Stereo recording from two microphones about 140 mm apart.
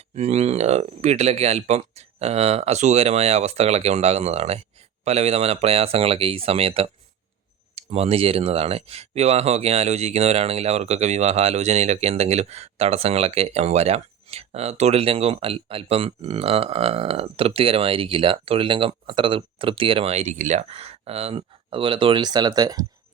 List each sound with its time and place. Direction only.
0.2 s speech: 50° right (ahead or behind); by 22.9 s 25° right (ahead or behind)